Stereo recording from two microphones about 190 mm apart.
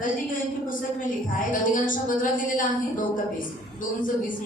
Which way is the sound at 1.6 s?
45° left (ahead or behind).